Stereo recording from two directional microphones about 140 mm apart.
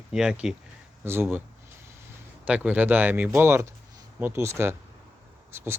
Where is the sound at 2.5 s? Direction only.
10° right (ahead or behind).